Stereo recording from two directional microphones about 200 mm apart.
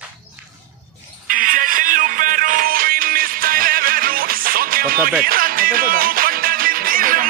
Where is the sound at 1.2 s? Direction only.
45° right (ahead or behind).